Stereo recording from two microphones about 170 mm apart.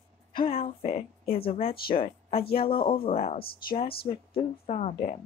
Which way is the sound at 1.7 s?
65° left (ahead or behind).